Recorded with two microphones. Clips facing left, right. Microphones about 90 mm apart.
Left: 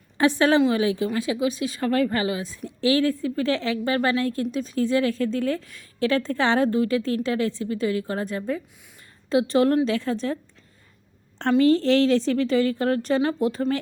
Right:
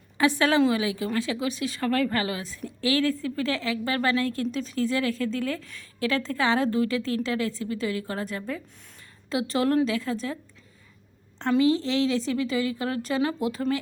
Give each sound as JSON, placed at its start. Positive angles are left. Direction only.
{"t": 0.2, "sound": "a woman's voice", "side_deg": 30}
{"t": 11.6, "sound": "a woman's voice", "side_deg": 50}